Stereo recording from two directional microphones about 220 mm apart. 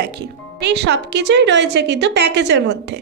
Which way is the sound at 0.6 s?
50° right (ahead or behind).